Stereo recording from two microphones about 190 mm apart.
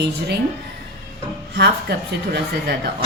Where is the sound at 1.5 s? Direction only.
60° right (ahead or behind).